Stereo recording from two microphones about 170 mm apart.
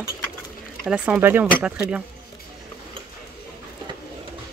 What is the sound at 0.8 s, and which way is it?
Speech, 5° right (ahead or behind).